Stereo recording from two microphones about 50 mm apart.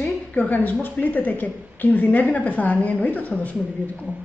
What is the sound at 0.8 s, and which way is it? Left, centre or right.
A woman's voice, left.